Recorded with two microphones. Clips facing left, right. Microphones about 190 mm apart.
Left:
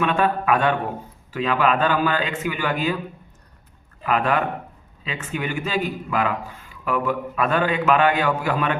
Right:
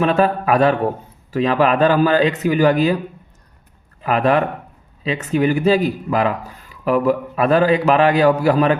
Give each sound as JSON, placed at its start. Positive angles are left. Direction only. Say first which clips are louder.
{"t": 0.0, "sound": "a man's voice", "louder": "right 5 dB", "side_deg": -35}
{"t": 4.0, "sound": "a man's voice", "louder": "right 5 dB", "side_deg": -35}